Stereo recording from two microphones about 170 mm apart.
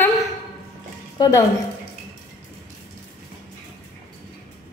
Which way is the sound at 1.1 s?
25° left (ahead or behind).